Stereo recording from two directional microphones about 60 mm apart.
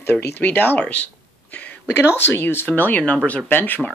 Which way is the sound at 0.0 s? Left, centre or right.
Left.